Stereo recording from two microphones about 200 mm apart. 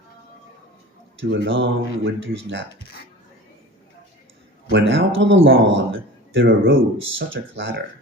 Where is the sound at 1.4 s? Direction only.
65° right (ahead or behind).